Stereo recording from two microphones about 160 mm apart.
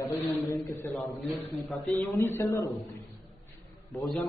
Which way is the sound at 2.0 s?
20° left (ahead or behind).